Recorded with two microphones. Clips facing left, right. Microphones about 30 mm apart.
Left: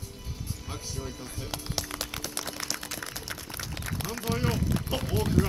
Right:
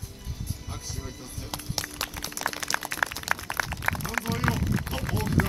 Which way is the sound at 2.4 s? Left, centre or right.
Right.